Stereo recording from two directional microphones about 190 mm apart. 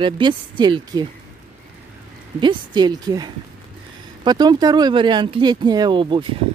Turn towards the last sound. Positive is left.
turn(degrees=-25)  # may be behind; listen again after turning